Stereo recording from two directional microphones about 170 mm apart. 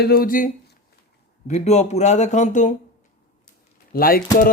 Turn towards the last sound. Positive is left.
turn(degrees=60)  # may be behind; listen again after turning